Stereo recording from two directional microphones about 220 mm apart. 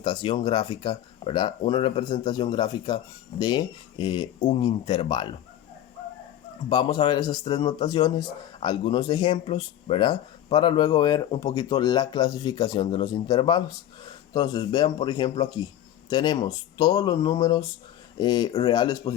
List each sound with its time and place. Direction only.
0.0 s speech: 20° left (ahead or behind)
4.4 s speech: 35° left (ahead or behind)
4.6 s speech: 20° left (ahead or behind)
6.7 s speech: 20° left (ahead or behind)